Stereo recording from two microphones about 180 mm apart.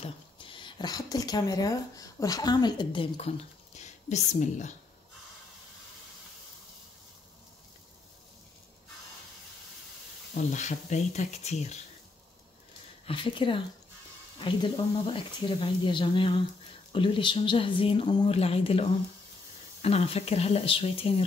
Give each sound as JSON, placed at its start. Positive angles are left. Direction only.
{"t": 0.0, "sound": "speech", "side_deg": 30}
{"t": 10.3, "sound": "speech", "side_deg": 45}
{"t": 13.0, "sound": "speech", "side_deg": 30}